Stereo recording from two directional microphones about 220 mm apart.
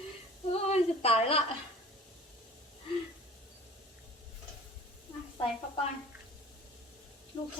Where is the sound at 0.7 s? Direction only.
30° left (ahead or behind).